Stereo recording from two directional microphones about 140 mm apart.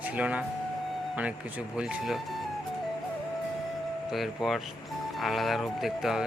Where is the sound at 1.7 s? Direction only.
5° right (ahead or behind).